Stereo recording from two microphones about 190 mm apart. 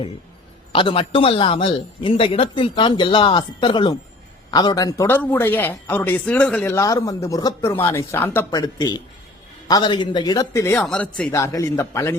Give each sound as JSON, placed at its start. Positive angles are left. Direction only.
{"t": 0.7, "sound": "a man's voice", "side_deg": 25}
{"t": 10.8, "sound": "speech", "side_deg": 5}